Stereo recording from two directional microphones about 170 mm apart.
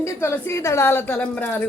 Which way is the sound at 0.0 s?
15° left (ahead or behind).